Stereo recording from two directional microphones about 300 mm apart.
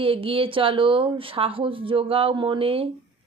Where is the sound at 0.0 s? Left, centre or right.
Centre.